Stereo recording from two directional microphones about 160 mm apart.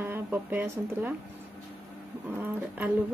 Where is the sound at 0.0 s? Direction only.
15° right (ahead or behind).